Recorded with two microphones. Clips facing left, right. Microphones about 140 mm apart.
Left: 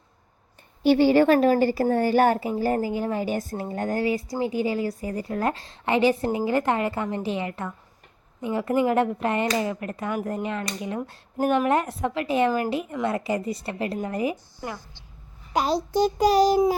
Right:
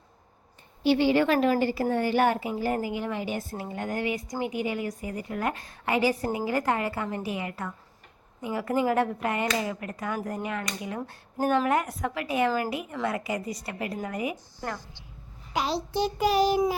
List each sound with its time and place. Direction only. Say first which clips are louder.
0.8 s a woman's voice: left 5 dB; 45° left (ahead or behind)
15.5 s a child's voice: left 5 dB; 45° left (ahead or behind)